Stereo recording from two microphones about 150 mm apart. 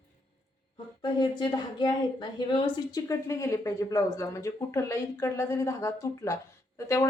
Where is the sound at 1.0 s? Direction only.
30° left (ahead or behind).